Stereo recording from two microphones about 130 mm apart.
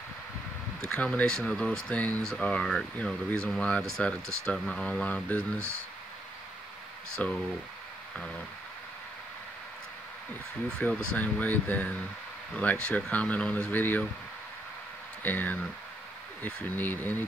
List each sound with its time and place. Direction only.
0.8 s speech: 10° left (ahead or behind)
7.2 s speech: 10° left (ahead or behind)
10.8 s speech: 10° left (ahead or behind)
15.2 s speech: 15° left (ahead or behind)